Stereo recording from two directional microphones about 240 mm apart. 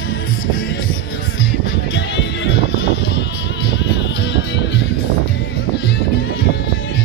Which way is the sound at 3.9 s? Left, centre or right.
Left.